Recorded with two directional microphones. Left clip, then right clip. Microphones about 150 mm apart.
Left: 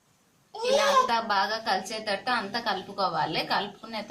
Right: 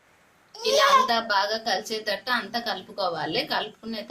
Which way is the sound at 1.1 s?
50° right (ahead or behind).